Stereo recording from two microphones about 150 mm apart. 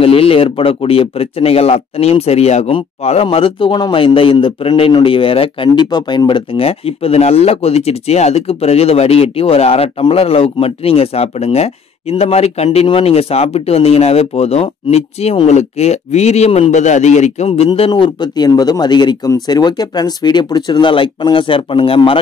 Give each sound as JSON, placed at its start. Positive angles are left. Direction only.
{"t": 0.0, "sound": "speech", "side_deg": 40}